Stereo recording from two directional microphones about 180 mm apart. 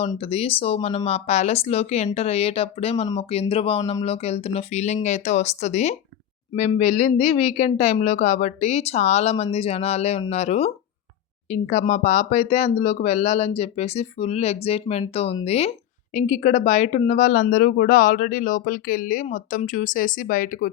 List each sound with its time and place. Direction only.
0.2 s speech: 35° left (ahead or behind); by 20.7 s 50° left (ahead or behind)